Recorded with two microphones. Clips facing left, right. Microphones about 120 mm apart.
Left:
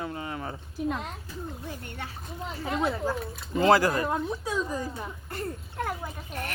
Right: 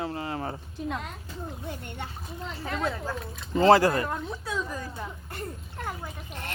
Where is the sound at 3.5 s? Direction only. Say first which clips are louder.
Right 2 dB; 30° right (ahead or behind).